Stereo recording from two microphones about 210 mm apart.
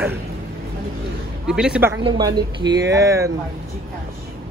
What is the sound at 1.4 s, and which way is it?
Speech, 5° right (ahead or behind).